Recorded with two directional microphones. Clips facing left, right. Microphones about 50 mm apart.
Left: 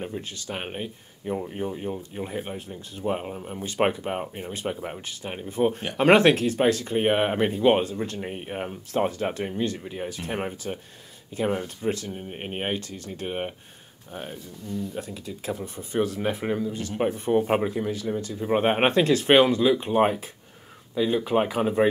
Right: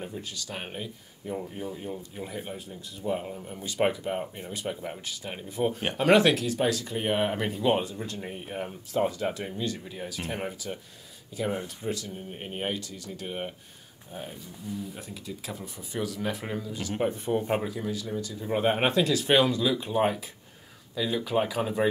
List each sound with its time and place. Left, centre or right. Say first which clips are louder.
0.0 s speech: left 4 dB; left
1.3 s speech: left 5 dB; left
15.0 s speech: left 5 dB; left